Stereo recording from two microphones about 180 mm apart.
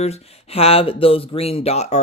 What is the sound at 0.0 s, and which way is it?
Speech, 35° left (ahead or behind).